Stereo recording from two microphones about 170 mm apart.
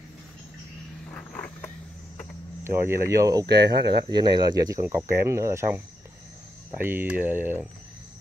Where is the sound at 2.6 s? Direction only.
15° right (ahead or behind).